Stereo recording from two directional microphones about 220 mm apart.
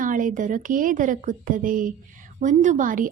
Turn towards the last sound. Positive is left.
turn(degrees=-35)  # may be behind; listen again after turning